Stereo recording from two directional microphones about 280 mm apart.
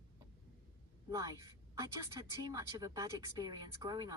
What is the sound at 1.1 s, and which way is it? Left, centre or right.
Speech, centre.